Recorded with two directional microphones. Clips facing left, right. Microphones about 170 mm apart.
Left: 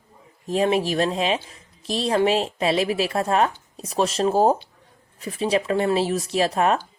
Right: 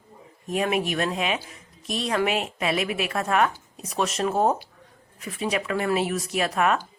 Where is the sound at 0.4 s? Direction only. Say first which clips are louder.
Left 4 dB; 30° left (ahead or behind).